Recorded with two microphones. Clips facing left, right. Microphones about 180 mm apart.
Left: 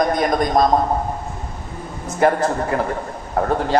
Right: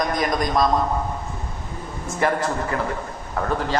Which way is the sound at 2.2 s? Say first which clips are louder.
Left 5 dB; 40° left (ahead or behind).